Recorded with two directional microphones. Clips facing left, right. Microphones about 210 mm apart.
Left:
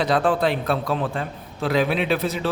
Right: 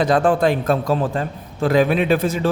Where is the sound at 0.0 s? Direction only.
50° right (ahead or behind).